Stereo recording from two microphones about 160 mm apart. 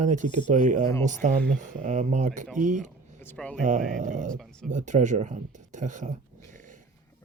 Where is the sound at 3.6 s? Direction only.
50° right (ahead or behind).